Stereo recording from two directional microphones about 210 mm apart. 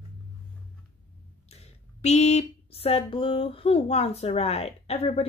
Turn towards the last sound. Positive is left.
turn(degrees=30)  # may be behind; listen again after turning